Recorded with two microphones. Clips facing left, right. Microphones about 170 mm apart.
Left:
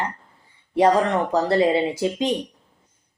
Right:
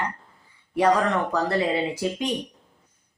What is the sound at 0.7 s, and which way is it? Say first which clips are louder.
Speech: left 3 dB; 25° left (ahead or behind).